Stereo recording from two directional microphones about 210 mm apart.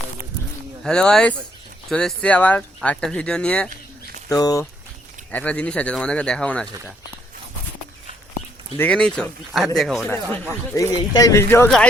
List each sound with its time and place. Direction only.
0.9 s speech: 5° left (ahead or behind)
4.3 s speech: 15° left (ahead or behind)
5.3 s speech: 5° left (ahead or behind)
8.8 s speech: 5° left (ahead or behind)